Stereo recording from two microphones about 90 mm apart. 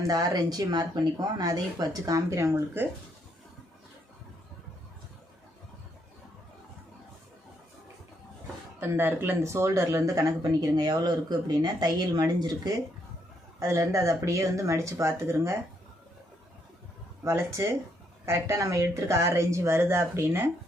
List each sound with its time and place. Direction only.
0.0 s speech: 45° right (ahead or behind); by 2.9 s 25° right (ahead or behind)
8.8 s speech: 25° right (ahead or behind); by 12.7 s 45° right (ahead or behind)
13.6 s speech: 35° right (ahead or behind)
17.2 s speech: 30° right (ahead or behind)